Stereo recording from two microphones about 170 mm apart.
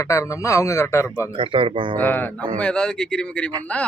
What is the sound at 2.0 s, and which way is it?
A man's voice, 10° left (ahead or behind).